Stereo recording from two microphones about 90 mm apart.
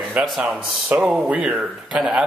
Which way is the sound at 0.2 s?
15° right (ahead or behind).